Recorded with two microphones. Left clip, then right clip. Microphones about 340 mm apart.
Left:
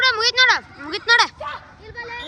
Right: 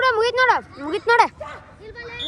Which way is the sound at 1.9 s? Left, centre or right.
Left.